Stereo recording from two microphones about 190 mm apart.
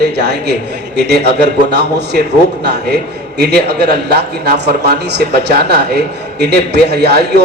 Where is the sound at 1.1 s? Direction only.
60° right (ahead or behind).